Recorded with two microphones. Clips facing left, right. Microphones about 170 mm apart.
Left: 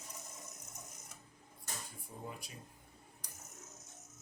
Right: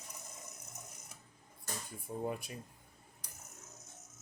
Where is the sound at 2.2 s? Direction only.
55° right (ahead or behind).